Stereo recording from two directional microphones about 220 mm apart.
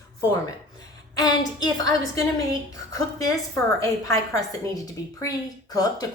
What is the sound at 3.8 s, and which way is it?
A woman's voice, 15° left (ahead or behind).